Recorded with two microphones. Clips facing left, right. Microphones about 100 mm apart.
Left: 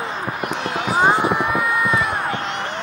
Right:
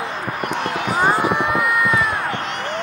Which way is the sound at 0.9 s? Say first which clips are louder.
Left 1 dB; 20° left (ahead or behind).